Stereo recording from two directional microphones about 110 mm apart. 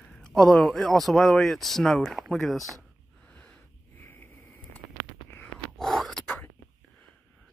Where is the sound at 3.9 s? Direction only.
20° left (ahead or behind).